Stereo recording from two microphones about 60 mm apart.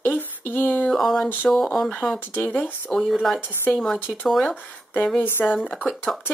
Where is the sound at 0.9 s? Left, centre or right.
Centre.